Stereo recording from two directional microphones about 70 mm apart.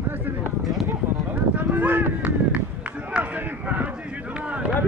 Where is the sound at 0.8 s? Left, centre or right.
Right.